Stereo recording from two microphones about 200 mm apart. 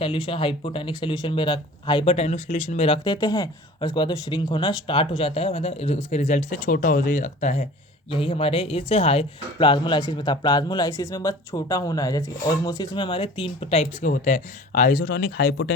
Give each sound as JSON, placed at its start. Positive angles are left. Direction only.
{"t": 0.0, "sound": "speech", "side_deg": 25}
{"t": 8.1, "sound": "speech", "side_deg": 25}